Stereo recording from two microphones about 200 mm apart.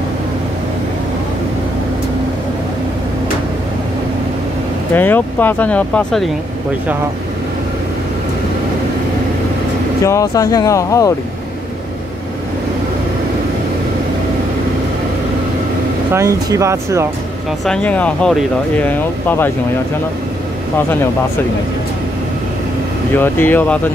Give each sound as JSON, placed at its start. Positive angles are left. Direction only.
{"t": 4.9, "sound": "speech", "side_deg": 10}
{"t": 10.0, "sound": "speech", "side_deg": 15}
{"t": 16.1, "sound": "speech", "side_deg": -15}
{"t": 17.6, "sound": "speech", "side_deg": 5}
{"t": 23.1, "sound": "speech", "side_deg": 10}